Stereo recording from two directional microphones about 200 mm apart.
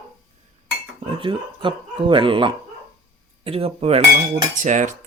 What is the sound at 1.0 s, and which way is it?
Speech, 25° right (ahead or behind).